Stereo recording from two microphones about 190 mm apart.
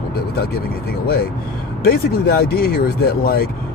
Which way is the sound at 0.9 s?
50° left (ahead or behind).